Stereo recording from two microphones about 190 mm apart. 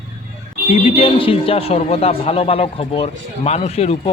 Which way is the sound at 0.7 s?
30° left (ahead or behind).